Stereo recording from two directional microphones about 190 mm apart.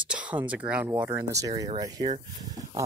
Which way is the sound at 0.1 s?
5° right (ahead or behind).